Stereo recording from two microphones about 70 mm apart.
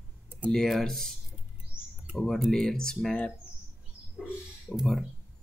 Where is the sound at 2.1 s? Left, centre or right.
Centre.